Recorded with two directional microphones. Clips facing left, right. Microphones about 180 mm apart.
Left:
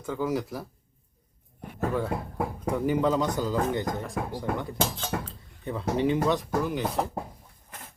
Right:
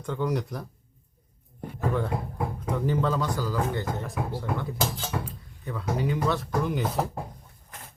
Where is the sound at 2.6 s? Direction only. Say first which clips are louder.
Left 2 dB; 10° left (ahead or behind).